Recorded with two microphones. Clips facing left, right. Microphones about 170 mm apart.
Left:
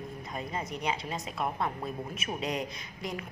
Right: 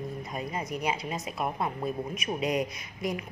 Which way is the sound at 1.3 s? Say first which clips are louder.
Right 1 dB; 20° right (ahead or behind).